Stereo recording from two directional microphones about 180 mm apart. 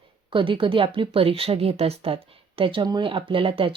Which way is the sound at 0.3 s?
30° right (ahead or behind).